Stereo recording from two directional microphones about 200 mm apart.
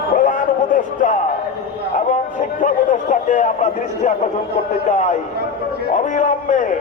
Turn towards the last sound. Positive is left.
turn(degrees=40)  # may be behind; listen again after turning